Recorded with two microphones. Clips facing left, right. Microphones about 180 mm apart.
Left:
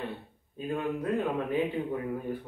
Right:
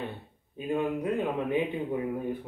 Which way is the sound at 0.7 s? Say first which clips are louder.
Right 2 dB; 20° right (ahead or behind).